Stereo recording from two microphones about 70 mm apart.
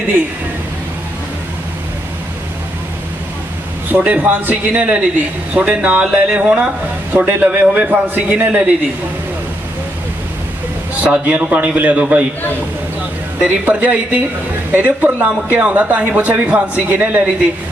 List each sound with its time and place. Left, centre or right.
3.9 s a man's voice: right
7.1 s speech: right
11.0 s speech: centre
13.4 s speech: right